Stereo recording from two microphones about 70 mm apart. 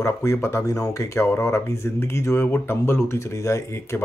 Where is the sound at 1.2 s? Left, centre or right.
Left.